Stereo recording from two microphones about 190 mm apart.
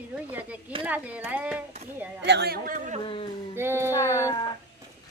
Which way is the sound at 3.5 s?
10° right (ahead or behind).